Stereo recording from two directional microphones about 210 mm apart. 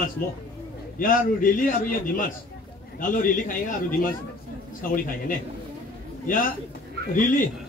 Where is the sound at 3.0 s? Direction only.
40° left (ahead or behind).